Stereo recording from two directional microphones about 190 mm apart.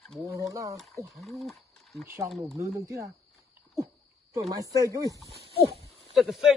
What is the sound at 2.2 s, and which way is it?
Speech, centre (ahead or behind).